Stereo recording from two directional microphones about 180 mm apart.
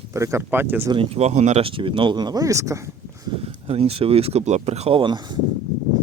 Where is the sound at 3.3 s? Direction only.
35° right (ahead or behind).